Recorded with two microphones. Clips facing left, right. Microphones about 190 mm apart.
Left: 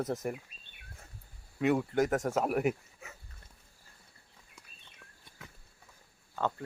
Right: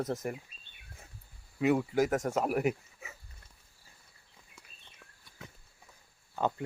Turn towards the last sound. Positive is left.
turn(degrees=-15)  # may be behind; listen again after turning